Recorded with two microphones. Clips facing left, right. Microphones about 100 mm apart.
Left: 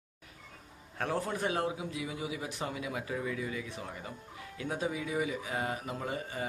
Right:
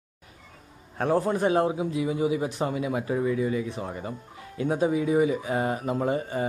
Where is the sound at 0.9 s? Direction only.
30° right (ahead or behind).